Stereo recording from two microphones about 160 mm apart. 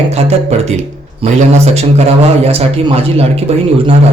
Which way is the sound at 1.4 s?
45° right (ahead or behind).